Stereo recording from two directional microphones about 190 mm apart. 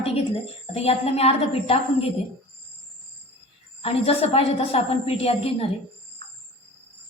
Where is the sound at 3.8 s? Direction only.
30° left (ahead or behind).